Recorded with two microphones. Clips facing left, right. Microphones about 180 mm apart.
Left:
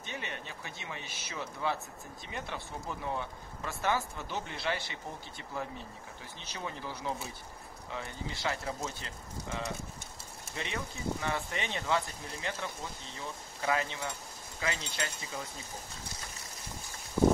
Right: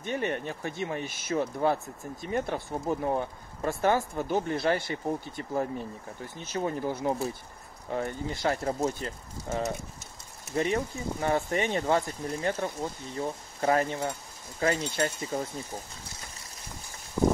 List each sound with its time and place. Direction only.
0.0 s speech: 50° right (ahead or behind)